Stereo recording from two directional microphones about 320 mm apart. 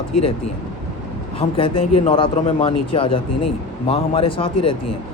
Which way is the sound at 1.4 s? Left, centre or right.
Centre.